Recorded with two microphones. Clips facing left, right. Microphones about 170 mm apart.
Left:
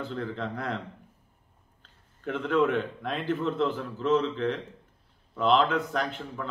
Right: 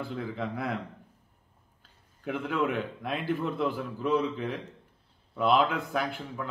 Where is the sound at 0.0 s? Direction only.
5° right (ahead or behind).